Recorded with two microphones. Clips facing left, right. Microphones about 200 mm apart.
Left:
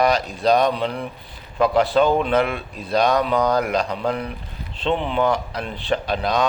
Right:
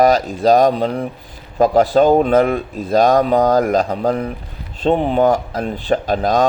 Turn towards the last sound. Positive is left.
turn(degrees=-45)  # may be behind; listen again after turning